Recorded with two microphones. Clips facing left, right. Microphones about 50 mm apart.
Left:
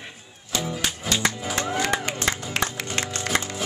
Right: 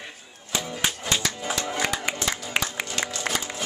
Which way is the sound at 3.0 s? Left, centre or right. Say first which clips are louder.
Left 2 dB; left.